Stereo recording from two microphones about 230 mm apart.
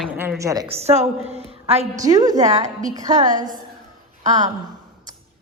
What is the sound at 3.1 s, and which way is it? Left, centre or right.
Speech, right.